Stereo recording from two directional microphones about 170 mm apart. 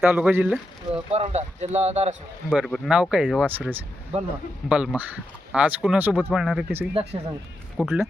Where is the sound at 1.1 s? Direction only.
40° right (ahead or behind).